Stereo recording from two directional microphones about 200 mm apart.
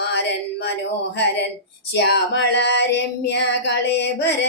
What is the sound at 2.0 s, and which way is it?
Female singing, 55° left (ahead or behind).